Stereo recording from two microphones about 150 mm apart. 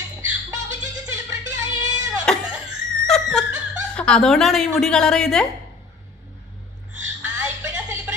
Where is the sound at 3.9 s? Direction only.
5° left (ahead or behind).